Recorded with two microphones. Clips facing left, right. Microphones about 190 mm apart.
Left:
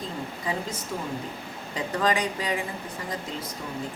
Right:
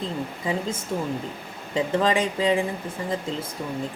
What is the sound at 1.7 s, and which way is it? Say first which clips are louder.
Speech: right 4 dB; 25° right (ahead or behind).